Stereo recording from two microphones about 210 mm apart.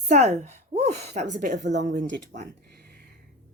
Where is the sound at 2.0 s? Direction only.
55° right (ahead or behind).